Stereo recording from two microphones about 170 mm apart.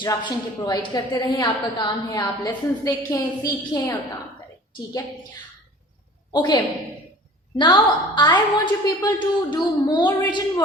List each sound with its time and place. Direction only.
0.0 s a woman's voice: 25° left (ahead or behind)
6.3 s a woman's voice: 25° left (ahead or behind)